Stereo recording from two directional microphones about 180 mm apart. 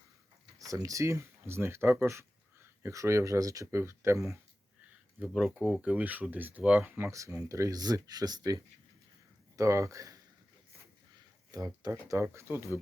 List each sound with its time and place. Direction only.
0.6 s speech: 20° right (ahead or behind)
5.2 s speech: 5° right (ahead or behind)
11.5 s speech: 20° right (ahead or behind)